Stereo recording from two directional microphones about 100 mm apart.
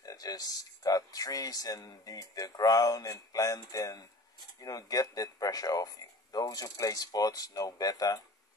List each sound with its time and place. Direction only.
0.0 s speech: 35° left (ahead or behind)